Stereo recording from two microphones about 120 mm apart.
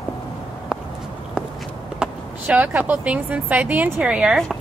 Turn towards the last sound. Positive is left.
turn(degrees=-5)  # may be behind; listen again after turning